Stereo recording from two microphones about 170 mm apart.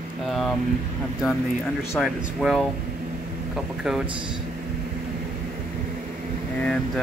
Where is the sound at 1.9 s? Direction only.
Centre (ahead or behind).